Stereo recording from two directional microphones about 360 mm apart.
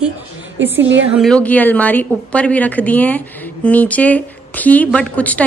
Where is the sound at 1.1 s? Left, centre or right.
Centre.